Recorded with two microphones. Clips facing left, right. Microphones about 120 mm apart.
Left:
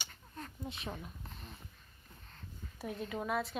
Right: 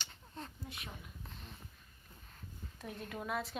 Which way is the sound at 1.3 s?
Centre (ahead or behind).